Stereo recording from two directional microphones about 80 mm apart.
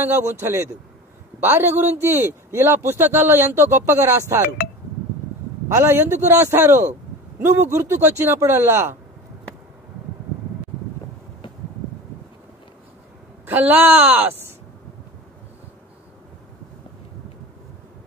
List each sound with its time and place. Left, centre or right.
0.0 s a man's voice: right
5.7 s a man's voice: right
13.5 s a woman's voice: right